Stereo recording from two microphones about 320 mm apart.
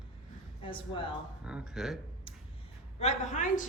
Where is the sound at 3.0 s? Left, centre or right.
Left.